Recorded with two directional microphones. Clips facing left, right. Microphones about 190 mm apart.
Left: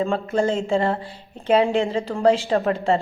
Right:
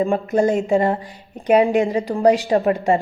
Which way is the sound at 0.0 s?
15° right (ahead or behind).